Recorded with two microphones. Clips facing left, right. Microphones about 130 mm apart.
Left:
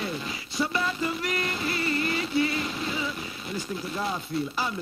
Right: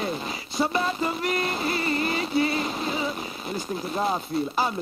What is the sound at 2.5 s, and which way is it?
Speech, 40° right (ahead or behind).